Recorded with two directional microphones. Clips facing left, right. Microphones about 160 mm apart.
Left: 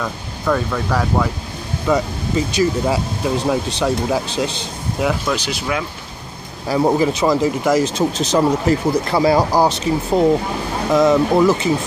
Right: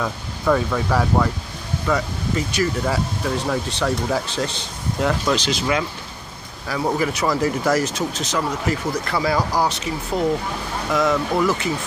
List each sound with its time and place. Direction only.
0.0 s speech: 5° right (ahead or behind)
1.9 s speech: 20° left (ahead or behind)
6.7 s speech: 30° left (ahead or behind)
7.8 s speech: 30° left (ahead or behind)